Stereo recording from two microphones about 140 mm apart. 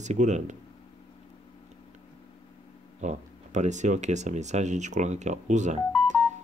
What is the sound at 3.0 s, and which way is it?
Speech, 55° right (ahead or behind).